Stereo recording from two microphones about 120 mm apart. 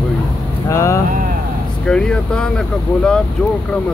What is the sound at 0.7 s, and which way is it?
Speech, 25° left (ahead or behind).